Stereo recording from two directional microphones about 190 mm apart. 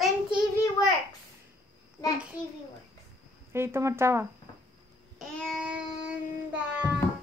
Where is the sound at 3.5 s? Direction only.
15° right (ahead or behind).